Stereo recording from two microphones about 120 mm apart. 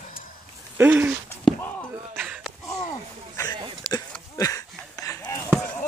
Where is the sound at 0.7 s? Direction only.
15° right (ahead or behind).